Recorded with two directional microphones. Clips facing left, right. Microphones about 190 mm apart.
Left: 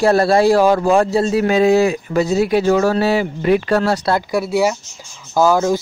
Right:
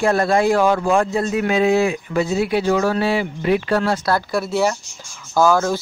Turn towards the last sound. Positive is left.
turn(degrees=15)  # may be behind; listen again after turning